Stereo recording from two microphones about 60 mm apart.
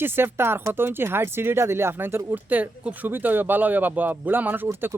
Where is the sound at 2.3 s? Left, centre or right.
Right.